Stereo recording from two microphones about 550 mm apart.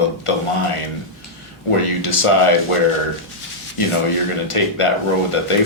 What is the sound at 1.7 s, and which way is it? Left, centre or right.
Speech, left.